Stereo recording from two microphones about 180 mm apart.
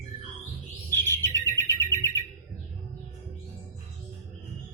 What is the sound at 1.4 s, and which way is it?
Bird, 15° left (ahead or behind).